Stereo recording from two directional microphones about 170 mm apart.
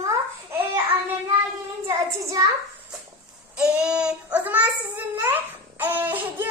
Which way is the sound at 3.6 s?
5° right (ahead or behind).